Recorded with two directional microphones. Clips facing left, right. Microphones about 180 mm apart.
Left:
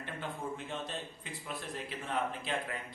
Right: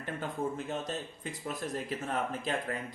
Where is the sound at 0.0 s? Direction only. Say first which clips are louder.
Right 5 dB; 40° right (ahead or behind).